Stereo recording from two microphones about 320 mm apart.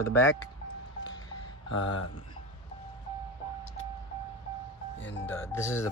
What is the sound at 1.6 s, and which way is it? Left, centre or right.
Speech, left.